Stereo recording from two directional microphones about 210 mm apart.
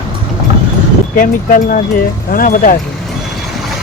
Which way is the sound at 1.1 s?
40° left (ahead or behind).